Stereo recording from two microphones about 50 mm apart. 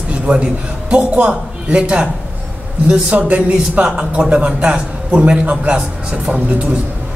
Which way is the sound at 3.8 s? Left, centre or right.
Right.